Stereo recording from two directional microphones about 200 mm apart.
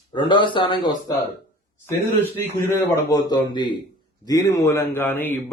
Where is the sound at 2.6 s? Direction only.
15° left (ahead or behind).